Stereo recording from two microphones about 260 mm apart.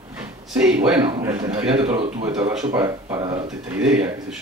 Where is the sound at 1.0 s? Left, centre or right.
Centre.